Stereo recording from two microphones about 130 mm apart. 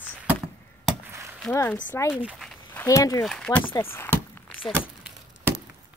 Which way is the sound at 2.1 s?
10° right (ahead or behind).